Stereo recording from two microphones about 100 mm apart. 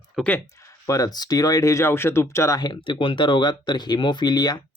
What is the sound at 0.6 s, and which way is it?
Speech, 35° left (ahead or behind).